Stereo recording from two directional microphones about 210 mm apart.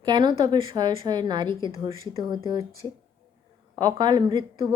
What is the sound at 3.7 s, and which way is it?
Speech, 20° right (ahead or behind).